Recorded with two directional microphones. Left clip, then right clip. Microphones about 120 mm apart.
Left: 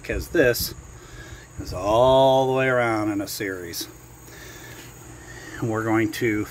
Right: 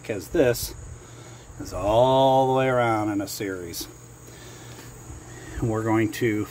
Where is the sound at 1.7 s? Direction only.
5° right (ahead or behind).